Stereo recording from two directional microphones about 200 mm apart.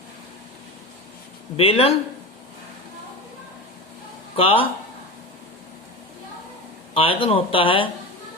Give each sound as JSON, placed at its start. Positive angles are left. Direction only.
{"t": 1.5, "sound": "speech", "side_deg": 30}
{"t": 4.4, "sound": "speech", "side_deg": 25}
{"t": 6.9, "sound": "speech", "side_deg": 25}